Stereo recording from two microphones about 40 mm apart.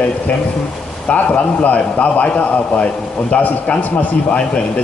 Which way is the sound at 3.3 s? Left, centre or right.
Left.